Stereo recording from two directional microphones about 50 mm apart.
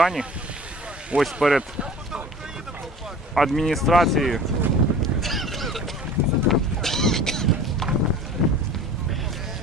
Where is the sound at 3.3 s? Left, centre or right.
Centre.